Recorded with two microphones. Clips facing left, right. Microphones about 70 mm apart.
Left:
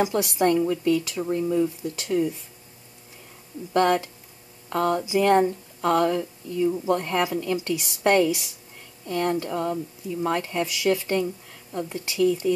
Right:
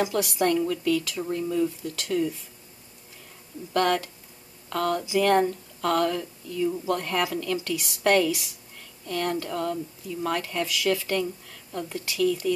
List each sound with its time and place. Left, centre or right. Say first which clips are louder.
0.0 s a woman's voice: left 2 dB; left
3.7 s a woman's voice: left 3 dB; centre